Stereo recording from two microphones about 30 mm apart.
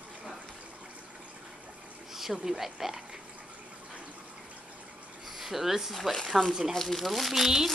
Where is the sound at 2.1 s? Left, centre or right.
Centre.